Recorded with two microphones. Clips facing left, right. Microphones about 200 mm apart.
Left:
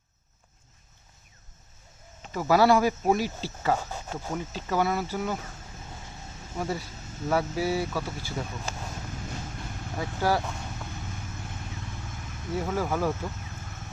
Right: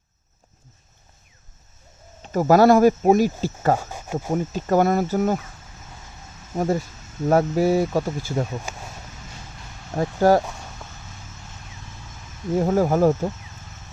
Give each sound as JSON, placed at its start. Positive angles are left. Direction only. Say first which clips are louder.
{"t": 2.2, "sound": "speech", "louder": "right 7 dB", "side_deg": -45}
{"t": 6.6, "sound": "speech", "louder": "right 9 dB", "side_deg": -45}
{"t": 10.0, "sound": "speech", "louder": "right 10 dB", "side_deg": -45}
{"t": 12.5, "sound": "speech", "louder": "right 9 dB", "side_deg": -45}